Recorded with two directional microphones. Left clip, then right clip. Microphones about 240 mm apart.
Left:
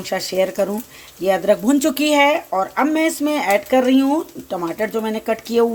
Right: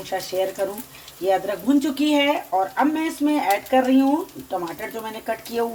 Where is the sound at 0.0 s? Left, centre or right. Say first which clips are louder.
Left 5 dB; left.